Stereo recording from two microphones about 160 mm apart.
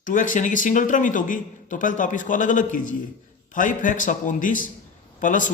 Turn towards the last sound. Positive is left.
turn(degrees=55)  # may be behind; listen again after turning